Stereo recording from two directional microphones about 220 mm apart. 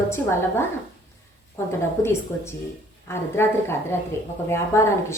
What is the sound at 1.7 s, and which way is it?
A woman's voice, 10° left (ahead or behind).